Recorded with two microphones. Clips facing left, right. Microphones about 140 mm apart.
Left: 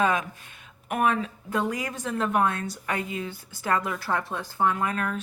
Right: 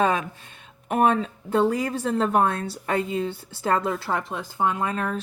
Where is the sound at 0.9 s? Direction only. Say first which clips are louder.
Right 4 dB; 30° right (ahead or behind).